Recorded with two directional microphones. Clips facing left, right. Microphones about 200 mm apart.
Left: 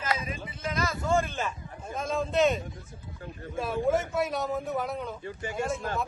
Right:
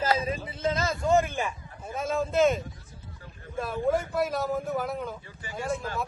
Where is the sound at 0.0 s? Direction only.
30° right (ahead or behind).